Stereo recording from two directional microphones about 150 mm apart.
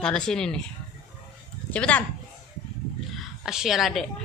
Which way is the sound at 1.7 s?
10° left (ahead or behind).